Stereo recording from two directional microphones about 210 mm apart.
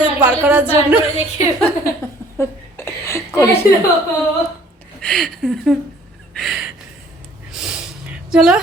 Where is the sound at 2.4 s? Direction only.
10° left (ahead or behind).